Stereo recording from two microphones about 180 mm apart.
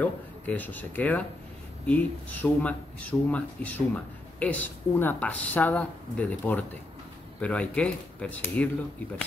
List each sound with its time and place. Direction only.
0.0 s speech: 10° left (ahead or behind)